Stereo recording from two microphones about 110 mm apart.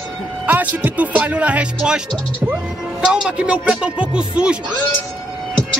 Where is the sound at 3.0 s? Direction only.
5° right (ahead or behind).